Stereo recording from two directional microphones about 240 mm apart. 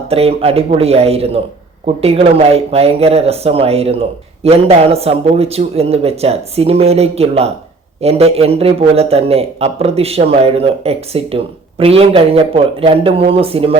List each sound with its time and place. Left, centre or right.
0.1 s a man's voice: right